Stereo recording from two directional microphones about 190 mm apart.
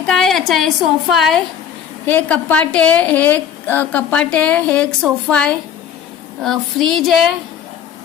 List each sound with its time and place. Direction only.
0.0 s a woman's voice: 5° left (ahead or behind)